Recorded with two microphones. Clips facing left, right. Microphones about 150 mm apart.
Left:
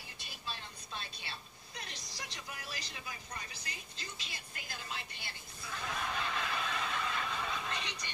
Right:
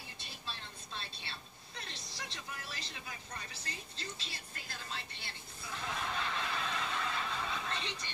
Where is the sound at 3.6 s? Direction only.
30° right (ahead or behind).